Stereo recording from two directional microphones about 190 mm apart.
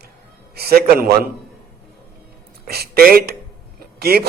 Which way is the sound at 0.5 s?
55° right (ahead or behind).